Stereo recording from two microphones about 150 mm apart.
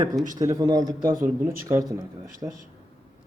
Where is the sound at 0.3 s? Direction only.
25° right (ahead or behind).